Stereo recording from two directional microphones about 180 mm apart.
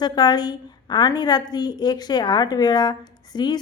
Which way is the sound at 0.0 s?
25° left (ahead or behind).